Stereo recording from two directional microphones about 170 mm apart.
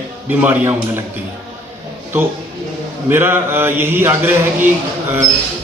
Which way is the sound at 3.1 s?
15° right (ahead or behind).